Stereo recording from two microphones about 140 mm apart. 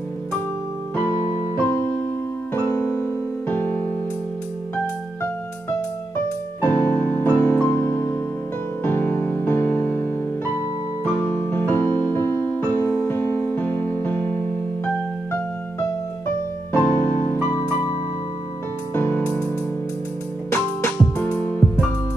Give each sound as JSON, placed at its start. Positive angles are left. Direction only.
{"t": 1.4, "sound": "music", "side_deg": 20}
{"t": 2.5, "sound": "electric piano", "side_deg": 15}
{"t": 5.2, "sound": "music", "side_deg": 15}
{"t": 16.3, "sound": "music", "side_deg": 15}
{"t": 18.9, "sound": "music", "side_deg": 15}
{"t": 20.5, "sound": "music", "side_deg": 15}